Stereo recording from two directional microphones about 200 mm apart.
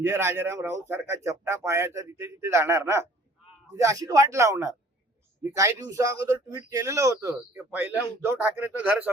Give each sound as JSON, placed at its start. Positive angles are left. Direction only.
{"t": 0.0, "sound": "speech", "side_deg": -10}